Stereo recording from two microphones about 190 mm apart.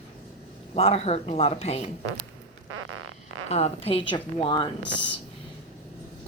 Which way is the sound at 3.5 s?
35° left (ahead or behind).